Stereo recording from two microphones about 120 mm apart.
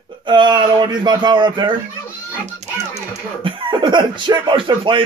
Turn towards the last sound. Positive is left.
turn(degrees=-45)  # may be behind; listen again after turning